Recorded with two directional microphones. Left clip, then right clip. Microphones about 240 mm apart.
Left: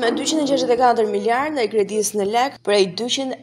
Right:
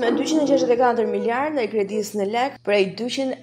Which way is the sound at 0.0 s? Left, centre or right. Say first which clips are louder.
Even; left.